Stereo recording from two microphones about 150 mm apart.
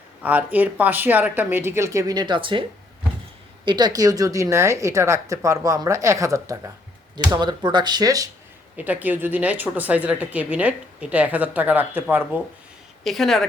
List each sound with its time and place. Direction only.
0.2 s speech: 10° right (ahead or behind); by 2.6 s 35° right (ahead or behind)
3.7 s a woman's voice: 25° right (ahead or behind)
8.7 s speech: 10° right (ahead or behind)
13.1 s a woman's voice: centre (ahead or behind)